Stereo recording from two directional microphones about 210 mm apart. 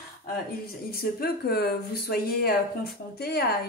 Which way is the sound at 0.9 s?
45° left (ahead or behind).